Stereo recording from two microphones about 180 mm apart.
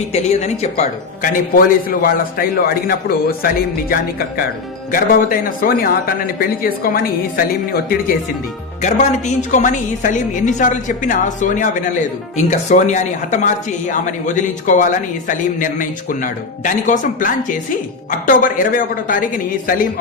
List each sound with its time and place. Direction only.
0.1 s a woman's voice: 40° left (ahead or behind); by 7.9 s 55° left (ahead or behind)
8.8 s a woman's voice: 40° left (ahead or behind)